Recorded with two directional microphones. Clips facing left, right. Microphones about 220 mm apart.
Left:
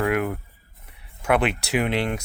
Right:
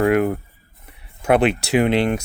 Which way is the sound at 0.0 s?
30° right (ahead or behind).